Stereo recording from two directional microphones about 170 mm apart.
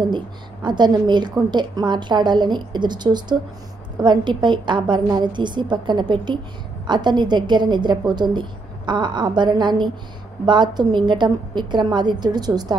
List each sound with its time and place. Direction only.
0.0 s a woman's voice: 25° right (ahead or behind)